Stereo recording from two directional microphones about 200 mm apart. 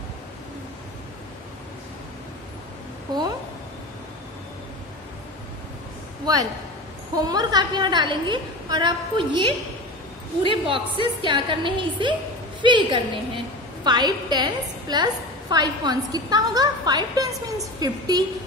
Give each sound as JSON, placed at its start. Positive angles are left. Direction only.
{"t": 7.2, "sound": "a woman's voice", "side_deg": -20}